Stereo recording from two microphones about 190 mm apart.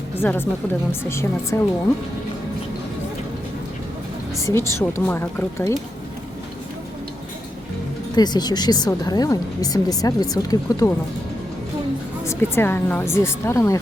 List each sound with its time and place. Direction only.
0.2 s speech: 10° left (ahead or behind)
4.4 s speech: 15° left (ahead or behind)
8.1 s speech: 20° left (ahead or behind)
12.2 s speech: 15° left (ahead or behind)